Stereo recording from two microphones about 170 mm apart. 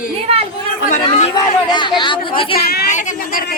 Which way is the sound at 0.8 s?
50° left (ahead or behind).